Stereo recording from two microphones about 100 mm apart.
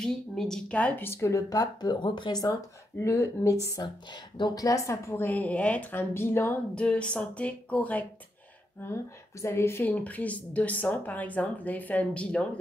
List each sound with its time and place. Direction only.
0.0 s speech: 5° left (ahead or behind); by 2.6 s 40° left (ahead or behind)
3.0 s a woman's voice: 25° left (ahead or behind)
4.4 s a woman's voice: 40° left (ahead or behind); by 6.6 s 25° left (ahead or behind)
6.7 s speech: 10° left (ahead or behind)
8.8 s speech: 25° left (ahead or behind); by 12.4 s 10° left (ahead or behind)